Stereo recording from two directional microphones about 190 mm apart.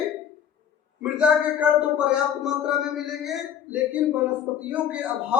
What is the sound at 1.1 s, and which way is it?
A man's voice, 5° right (ahead or behind).